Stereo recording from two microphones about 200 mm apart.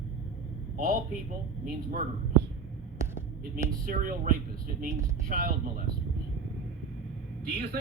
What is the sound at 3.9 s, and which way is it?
Speech, 45° right (ahead or behind).